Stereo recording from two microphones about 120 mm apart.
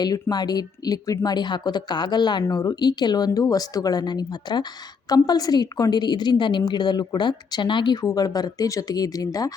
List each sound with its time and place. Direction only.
0.0 s speech: 35° left (ahead or behind)